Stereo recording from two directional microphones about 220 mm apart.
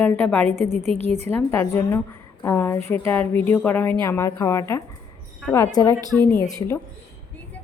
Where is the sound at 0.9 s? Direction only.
30° right (ahead or behind).